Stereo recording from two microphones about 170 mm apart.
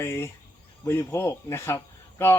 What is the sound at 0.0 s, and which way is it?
Speech, 15° left (ahead or behind).